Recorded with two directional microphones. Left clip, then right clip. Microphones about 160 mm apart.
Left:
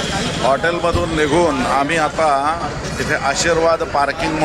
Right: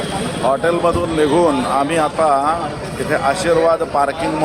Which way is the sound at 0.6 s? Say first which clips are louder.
Right 2 dB; 5° right (ahead or behind).